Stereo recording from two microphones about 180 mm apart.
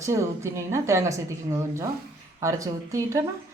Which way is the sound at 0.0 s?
15° right (ahead or behind).